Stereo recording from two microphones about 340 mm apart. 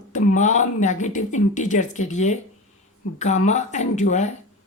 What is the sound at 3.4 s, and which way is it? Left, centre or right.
Speech, centre.